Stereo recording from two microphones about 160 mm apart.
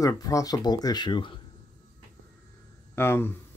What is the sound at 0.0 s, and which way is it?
Speech, 20° left (ahead or behind).